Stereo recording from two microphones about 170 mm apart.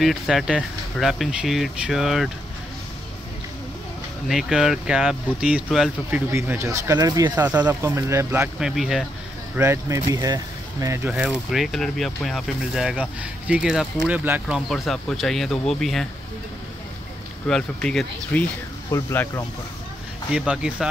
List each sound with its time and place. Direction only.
0.0 s speech: centre (ahead or behind)
4.3 s speech: centre (ahead or behind)
9.6 s speech: 15° right (ahead or behind)
14.7 s speech: centre (ahead or behind)
17.5 s speech: 5° left (ahead or behind)
18.9 s speech: 15° left (ahead or behind)
20.3 s speech: 5° right (ahead or behind)